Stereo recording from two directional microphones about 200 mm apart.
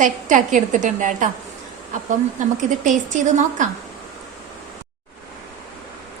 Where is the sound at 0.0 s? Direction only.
40° right (ahead or behind).